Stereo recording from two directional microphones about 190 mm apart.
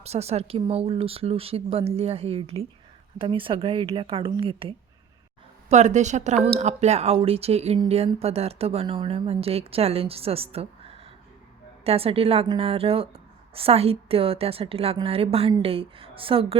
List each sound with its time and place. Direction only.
0.0 s a woman's voice: 35° right (ahead or behind)